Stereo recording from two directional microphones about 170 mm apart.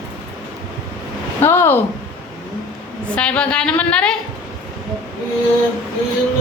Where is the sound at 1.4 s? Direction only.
15° left (ahead or behind).